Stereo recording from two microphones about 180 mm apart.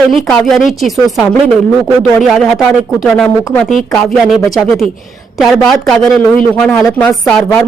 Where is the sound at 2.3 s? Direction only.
Centre (ahead or behind).